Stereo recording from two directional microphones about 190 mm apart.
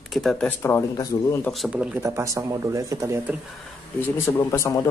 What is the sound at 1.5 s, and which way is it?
Speech, 5° right (ahead or behind).